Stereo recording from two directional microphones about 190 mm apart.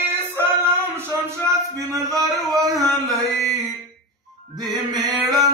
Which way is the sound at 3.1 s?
Centre (ahead or behind).